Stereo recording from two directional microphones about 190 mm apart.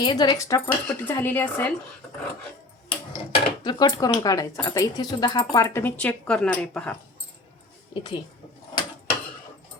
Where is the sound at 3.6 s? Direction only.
20° left (ahead or behind); by 7.0 s 5° left (ahead or behind).